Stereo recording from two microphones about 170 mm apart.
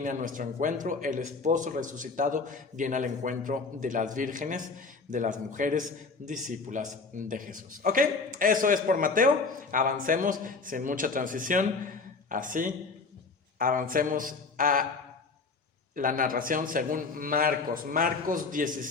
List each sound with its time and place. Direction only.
0.0 s a man's voice: 50° right (ahead or behind)
16.0 s a man's voice: 55° right (ahead or behind)